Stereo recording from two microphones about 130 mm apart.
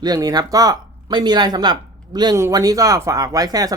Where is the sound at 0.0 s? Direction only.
30° right (ahead or behind).